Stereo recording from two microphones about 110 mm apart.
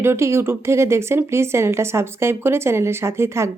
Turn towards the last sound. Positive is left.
turn(degrees=-25)  # may be behind; listen again after turning